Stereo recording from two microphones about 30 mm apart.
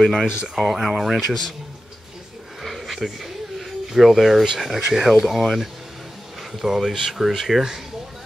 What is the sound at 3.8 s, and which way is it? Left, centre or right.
Speech, centre.